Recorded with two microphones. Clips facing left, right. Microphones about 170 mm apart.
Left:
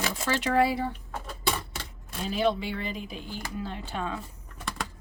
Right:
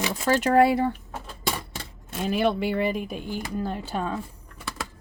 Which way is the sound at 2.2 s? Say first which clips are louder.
Right 3 dB; 60° right (ahead or behind).